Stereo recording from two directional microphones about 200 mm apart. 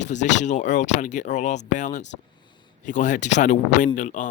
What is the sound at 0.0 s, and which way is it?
Speech, 35° left (ahead or behind).